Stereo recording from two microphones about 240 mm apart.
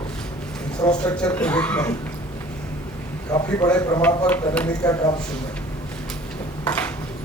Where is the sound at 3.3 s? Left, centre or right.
Centre.